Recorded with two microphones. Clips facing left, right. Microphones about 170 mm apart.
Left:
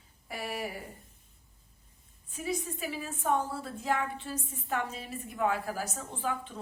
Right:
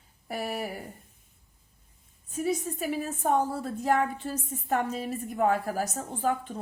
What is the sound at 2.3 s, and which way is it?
A woman's voice, 45° right (ahead or behind).